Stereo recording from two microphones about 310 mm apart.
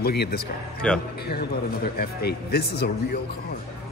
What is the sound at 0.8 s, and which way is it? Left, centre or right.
Speech, centre.